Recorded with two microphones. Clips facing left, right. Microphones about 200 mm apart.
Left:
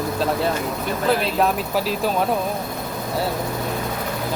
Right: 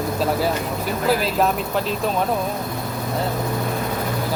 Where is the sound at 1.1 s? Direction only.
Centre (ahead or behind).